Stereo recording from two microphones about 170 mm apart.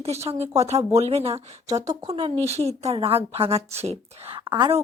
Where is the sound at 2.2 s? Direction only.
40° right (ahead or behind).